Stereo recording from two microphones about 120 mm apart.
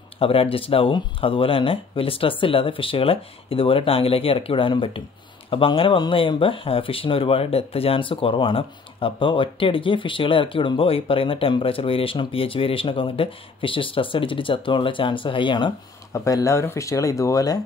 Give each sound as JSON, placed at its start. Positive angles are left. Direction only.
{"t": 0.2, "sound": "speech", "side_deg": 50}
{"t": 16.1, "sound": "speech", "side_deg": 25}